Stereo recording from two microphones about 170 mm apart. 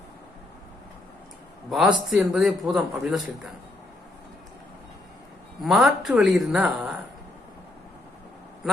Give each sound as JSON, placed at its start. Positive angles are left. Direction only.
{"t": 1.7, "sound": "a man's voice", "side_deg": -5}
{"t": 5.6, "sound": "a man's voice", "side_deg": 0}